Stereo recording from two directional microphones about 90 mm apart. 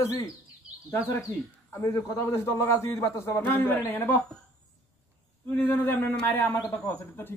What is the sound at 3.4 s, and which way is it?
Speech, 20° left (ahead or behind).